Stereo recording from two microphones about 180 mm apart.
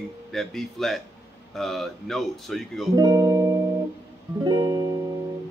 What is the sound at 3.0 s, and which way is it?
Speech, 20° right (ahead or behind).